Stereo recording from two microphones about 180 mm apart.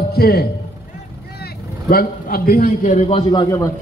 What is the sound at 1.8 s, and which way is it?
A man's voice, 55° left (ahead or behind).